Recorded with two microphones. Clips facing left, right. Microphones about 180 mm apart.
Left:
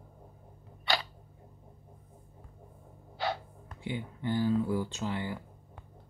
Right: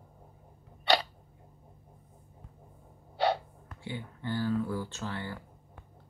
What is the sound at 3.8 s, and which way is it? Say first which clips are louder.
Speech: left 3 dB; 15° left (ahead or behind).